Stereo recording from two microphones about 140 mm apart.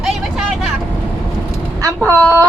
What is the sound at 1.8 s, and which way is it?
Speech, 25° right (ahead or behind).